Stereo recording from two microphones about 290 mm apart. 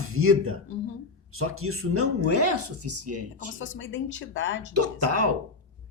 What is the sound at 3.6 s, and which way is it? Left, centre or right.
Speech, left.